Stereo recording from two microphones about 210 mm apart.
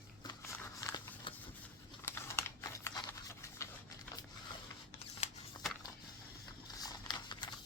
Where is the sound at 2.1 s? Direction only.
10° left (ahead or behind).